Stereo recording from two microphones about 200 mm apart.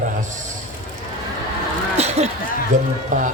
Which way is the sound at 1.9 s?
30° right (ahead or behind).